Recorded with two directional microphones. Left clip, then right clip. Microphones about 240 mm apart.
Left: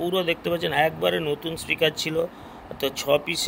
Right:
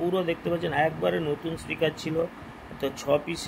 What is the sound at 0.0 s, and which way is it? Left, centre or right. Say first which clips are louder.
Speech: left 3 dB; left.